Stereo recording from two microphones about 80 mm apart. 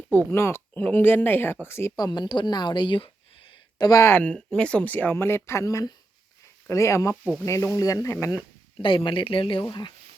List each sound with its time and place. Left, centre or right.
0.1 s speech: left
2.0 s speech: left
3.8 s speech: left
4.2 s speech: centre; by 8.4 s left
8.8 s speech: left
9.6 s speech: left